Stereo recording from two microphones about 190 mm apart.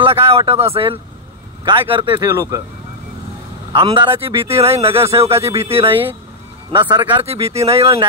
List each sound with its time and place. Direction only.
0.0 s speech: 30° right (ahead or behind)
3.7 s speech: 25° right (ahead or behind)